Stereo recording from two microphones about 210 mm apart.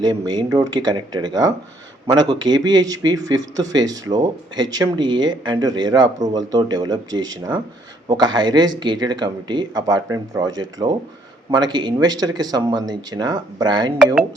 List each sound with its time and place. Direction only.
0.0 s speech: 20° right (ahead or behind)